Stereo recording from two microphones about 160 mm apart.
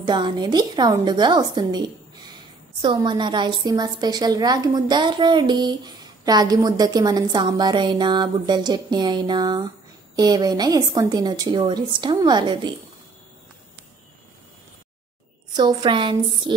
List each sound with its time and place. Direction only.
0.0 s a woman's voice: 30° right (ahead or behind)
15.5 s a woman's voice: 30° right (ahead or behind)